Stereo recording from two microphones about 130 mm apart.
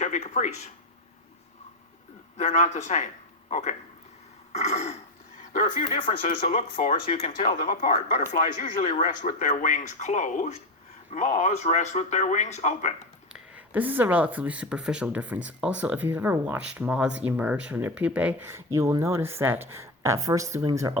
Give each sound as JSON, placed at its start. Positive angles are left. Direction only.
{"t": 0.0, "sound": "speech", "side_deg": 65}
{"t": 2.4, "sound": "speech", "side_deg": 60}
{"t": 4.5, "sound": "speech", "side_deg": 55}
{"t": 5.5, "sound": "speech", "side_deg": 90}
{"t": 7.4, "sound": "speech", "side_deg": 90}
{"t": 8.9, "sound": "speech", "side_deg": 70}
{"t": 13.3, "sound": "speech", "side_deg": -10}